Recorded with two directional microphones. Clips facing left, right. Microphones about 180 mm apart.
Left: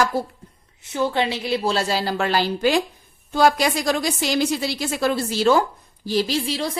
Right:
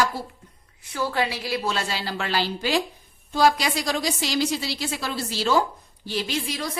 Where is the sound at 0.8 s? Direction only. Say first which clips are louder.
Left 4 dB; 25° left (ahead or behind); by 5.6 s 50° left (ahead or behind).